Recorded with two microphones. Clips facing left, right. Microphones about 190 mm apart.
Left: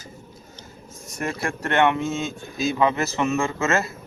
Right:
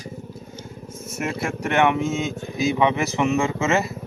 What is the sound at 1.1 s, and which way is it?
Speech, 5° right (ahead or behind).